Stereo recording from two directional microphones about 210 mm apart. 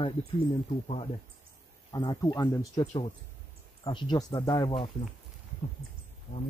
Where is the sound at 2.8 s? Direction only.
30° left (ahead or behind).